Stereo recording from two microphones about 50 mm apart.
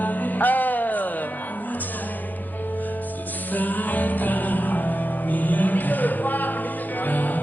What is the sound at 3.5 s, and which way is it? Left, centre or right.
Music, left.